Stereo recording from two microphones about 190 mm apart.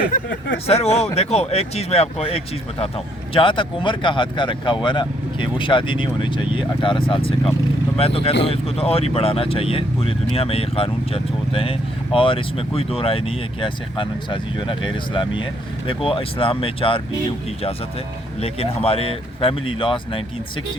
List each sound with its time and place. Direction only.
0.7 s speech: 35° left (ahead or behind)
18.3 s speech: 30° left (ahead or behind)